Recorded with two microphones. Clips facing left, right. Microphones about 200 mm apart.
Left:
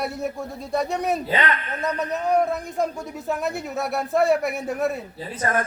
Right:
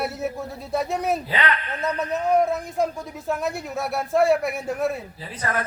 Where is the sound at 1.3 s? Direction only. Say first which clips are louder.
Left 1 dB; 45° left (ahead or behind).